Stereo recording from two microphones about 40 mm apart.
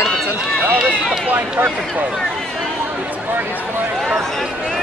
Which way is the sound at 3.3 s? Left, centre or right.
Right.